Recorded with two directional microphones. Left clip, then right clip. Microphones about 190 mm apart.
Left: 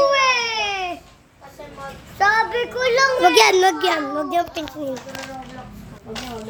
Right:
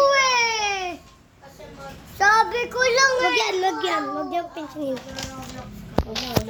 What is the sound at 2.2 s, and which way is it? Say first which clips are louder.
Child singing: even; 30° right (ahead or behind).